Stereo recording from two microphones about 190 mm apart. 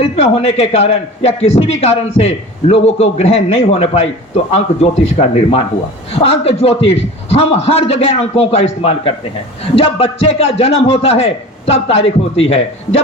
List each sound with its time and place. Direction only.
0.0 s a man's voice: 30° left (ahead or behind)